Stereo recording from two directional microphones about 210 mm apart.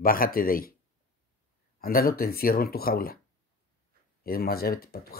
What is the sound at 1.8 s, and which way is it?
Speech, 45° left (ahead or behind).